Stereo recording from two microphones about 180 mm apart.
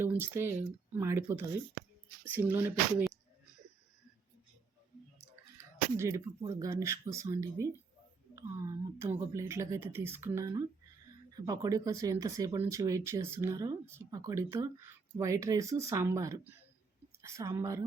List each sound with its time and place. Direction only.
0.0 s speech: 15° right (ahead or behind)
6.0 s speech: 15° right (ahead or behind)